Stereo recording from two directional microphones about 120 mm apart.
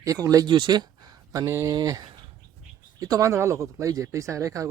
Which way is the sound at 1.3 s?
25° right (ahead or behind).